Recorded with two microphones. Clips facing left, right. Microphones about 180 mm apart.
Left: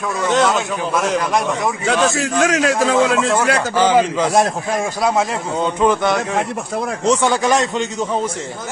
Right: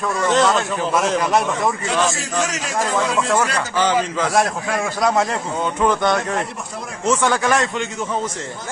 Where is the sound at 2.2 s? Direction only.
90° left.